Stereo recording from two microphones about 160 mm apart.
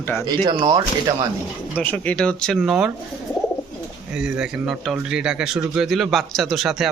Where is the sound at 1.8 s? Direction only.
10° left (ahead or behind).